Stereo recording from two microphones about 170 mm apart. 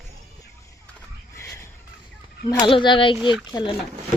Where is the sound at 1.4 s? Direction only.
15° left (ahead or behind).